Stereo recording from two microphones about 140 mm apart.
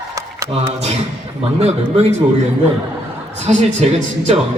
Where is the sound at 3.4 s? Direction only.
55° right (ahead or behind).